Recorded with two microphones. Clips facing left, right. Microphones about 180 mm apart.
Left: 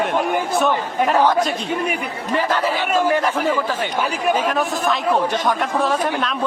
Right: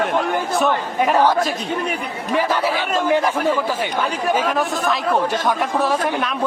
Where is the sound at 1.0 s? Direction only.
10° right (ahead or behind).